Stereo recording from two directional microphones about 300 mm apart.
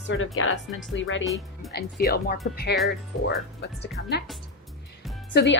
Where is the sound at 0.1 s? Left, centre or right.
Left.